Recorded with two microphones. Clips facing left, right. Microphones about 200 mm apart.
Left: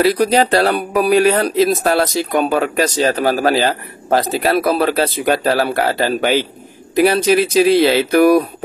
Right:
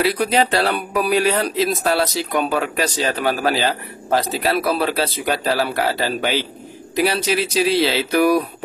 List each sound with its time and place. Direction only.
0.0 s speech: 40° left (ahead or behind)